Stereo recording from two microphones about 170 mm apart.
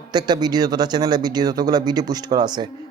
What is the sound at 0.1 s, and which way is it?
A man's voice, 25° right (ahead or behind).